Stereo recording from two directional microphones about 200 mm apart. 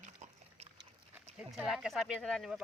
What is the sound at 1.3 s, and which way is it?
Speech, 5° right (ahead or behind).